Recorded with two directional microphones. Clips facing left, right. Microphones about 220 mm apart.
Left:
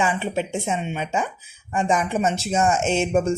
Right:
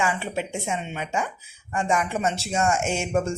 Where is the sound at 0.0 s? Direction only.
20° left (ahead or behind).